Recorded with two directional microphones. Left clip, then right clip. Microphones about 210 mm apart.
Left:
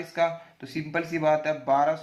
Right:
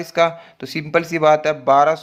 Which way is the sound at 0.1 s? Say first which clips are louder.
Right 9 dB; 50° right (ahead or behind).